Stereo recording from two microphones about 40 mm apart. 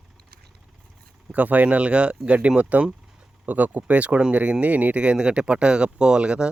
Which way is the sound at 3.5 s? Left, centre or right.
Right.